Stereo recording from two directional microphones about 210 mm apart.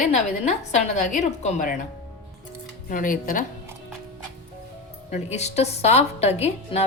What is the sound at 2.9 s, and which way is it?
Speech, 40° left (ahead or behind).